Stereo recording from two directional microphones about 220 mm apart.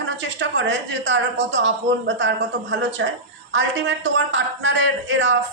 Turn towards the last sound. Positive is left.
turn(degrees=-60)  # may be behind; listen again after turning